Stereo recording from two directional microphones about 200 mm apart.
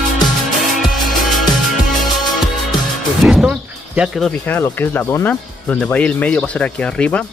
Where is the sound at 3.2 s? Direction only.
Centre (ahead or behind).